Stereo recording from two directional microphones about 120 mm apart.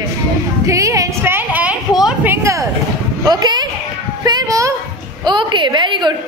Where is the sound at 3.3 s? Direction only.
35° right (ahead or behind).